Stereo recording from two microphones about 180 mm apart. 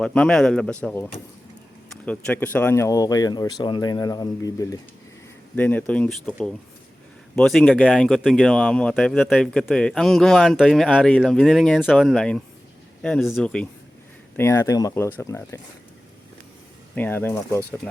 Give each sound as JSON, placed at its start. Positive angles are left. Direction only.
{"t": 0.0, "sound": "speech", "side_deg": 5}
{"t": 7.3, "sound": "speech", "side_deg": 5}
{"t": 16.9, "sound": "speech", "side_deg": 10}